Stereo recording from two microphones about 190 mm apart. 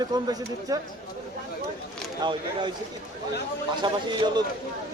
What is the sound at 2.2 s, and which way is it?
Speech, 25° right (ahead or behind).